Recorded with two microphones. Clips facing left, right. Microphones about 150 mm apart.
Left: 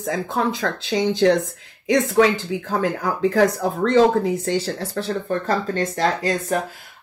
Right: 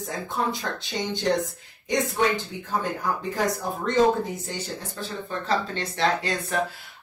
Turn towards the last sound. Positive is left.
turn(degrees=40)  # may be behind; listen again after turning